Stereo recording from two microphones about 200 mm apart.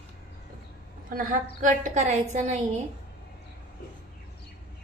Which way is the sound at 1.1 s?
45° right (ahead or behind).